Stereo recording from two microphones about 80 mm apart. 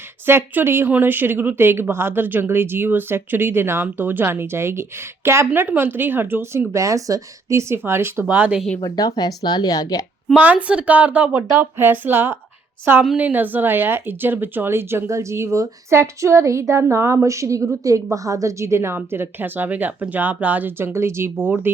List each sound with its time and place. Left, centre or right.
0.3 s a woman's voice: right
8.8 s speech: left
10.3 s a woman's voice: centre